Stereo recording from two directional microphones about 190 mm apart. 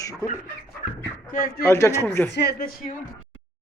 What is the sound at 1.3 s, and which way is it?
Speech, 45° left (ahead or behind).